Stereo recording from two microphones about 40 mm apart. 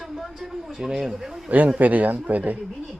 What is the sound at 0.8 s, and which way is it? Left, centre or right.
Speech, centre.